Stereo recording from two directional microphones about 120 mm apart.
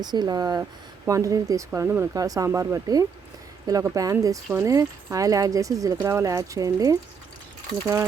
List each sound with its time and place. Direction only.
0.0 s speech: 35° right (ahead or behind)